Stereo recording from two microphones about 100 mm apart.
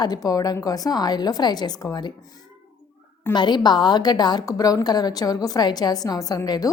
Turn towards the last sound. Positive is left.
turn(degrees=40)  # may be behind; listen again after turning